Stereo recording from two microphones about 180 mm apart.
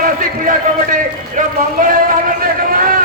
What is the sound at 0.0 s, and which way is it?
A man's voice, 50° right (ahead or behind).